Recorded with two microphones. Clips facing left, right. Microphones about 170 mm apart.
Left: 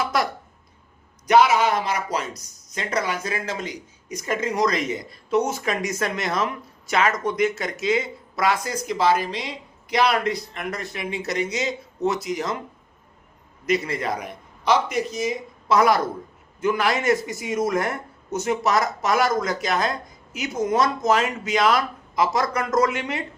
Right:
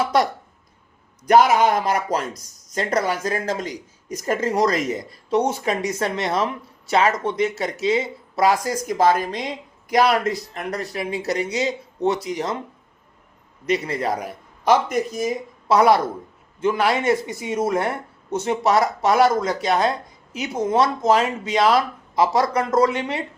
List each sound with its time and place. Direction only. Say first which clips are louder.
0.0 s speech: right 4 dB; 35° right (ahead or behind)
1.3 s speech: right 2 dB; 45° right (ahead or behind)
13.7 s speech: right 1 dB; 30° right (ahead or behind); by 15.4 s 50° right (ahead or behind)
15.7 s speech: right 3 dB; 30° right (ahead or behind)